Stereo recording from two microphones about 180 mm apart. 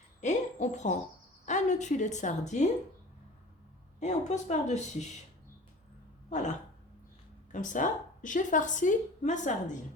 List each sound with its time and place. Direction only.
0.2 s hoot: 40° left (ahead or behind)
1.5 s a woman's voice: 40° left (ahead or behind)
4.0 s a woman's voice: 40° left (ahead or behind)
7.5 s a woman's voice: 45° left (ahead or behind)